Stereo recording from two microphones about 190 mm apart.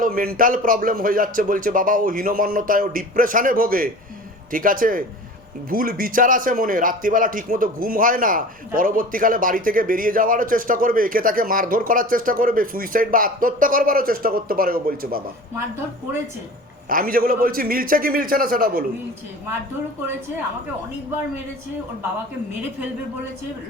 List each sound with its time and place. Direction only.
0.0 s a man's voice: 50° right (ahead or behind)
16.9 s a man's voice: 50° right (ahead or behind)